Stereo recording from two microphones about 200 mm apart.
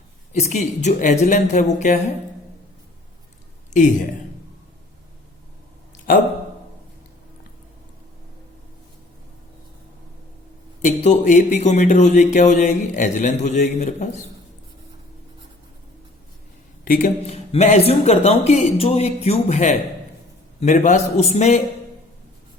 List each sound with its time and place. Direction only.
0.3 s speech: 35° left (ahead or behind)
3.7 s speech: 40° left (ahead or behind)
6.1 s speech: 45° left (ahead or behind)
10.8 s speech: 35° left (ahead or behind)
16.8 s speech: 45° left (ahead or behind)
17.2 s speech: 30° left (ahead or behind)